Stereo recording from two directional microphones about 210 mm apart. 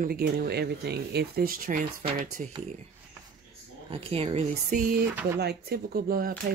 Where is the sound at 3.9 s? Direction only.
25° right (ahead or behind).